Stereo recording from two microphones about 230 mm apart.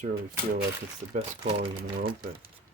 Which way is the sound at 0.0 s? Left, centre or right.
Right.